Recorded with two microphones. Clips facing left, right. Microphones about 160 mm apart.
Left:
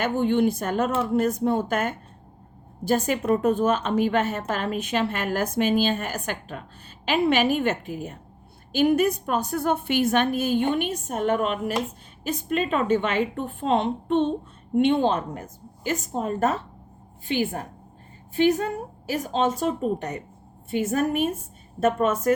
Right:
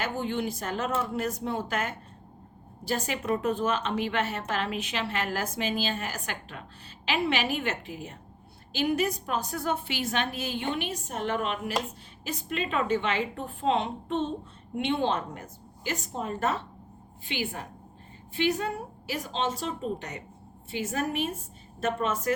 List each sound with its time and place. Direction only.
0.0 s a woman's voice: 55° left (ahead or behind)